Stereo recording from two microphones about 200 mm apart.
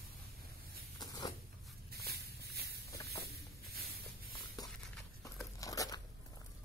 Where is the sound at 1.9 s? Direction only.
50° right (ahead or behind).